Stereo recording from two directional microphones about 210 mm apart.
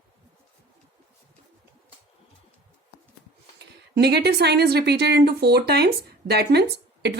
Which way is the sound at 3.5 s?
50° right (ahead or behind).